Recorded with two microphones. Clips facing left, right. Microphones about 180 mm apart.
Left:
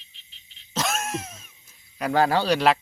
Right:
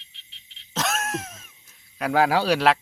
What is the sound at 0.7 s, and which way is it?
Speech, centre (ahead or behind).